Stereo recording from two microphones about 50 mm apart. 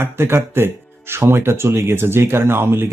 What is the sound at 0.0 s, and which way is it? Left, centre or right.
Speech, right.